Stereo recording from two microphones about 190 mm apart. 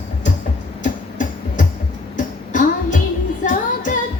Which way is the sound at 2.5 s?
40° left (ahead or behind).